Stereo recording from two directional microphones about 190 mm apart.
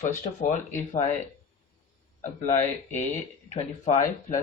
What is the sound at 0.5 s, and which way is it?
Speech, 40° left (ahead or behind).